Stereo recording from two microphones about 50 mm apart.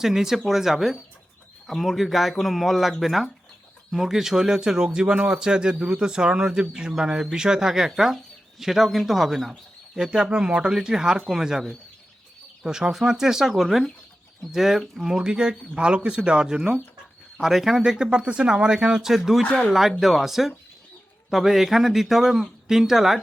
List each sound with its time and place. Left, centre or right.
0.0 s speech: centre
10.1 s speech: centre
12.6 s speech: centre
19.5 s speech: centre
20.0 s speech: centre